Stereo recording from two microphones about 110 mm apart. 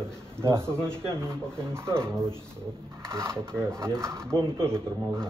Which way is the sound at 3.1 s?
25° right (ahead or behind).